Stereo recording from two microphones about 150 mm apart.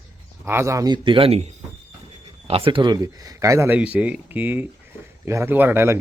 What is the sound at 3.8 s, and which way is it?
Speech, 10° right (ahead or behind).